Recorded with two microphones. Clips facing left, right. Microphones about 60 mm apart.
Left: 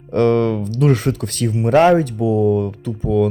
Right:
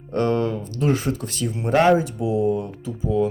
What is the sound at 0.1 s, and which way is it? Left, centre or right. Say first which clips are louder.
Speech: left 6 dB; left.